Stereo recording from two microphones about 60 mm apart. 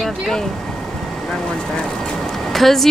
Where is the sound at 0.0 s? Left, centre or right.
Centre.